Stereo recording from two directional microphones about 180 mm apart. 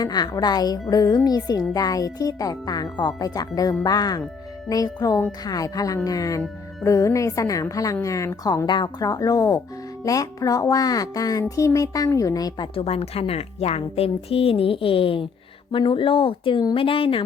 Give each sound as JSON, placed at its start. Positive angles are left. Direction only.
{"t": 0.0, "sound": "speech", "side_deg": 25}